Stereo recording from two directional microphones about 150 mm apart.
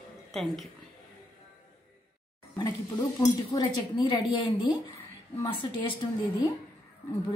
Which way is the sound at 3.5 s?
25° left (ahead or behind).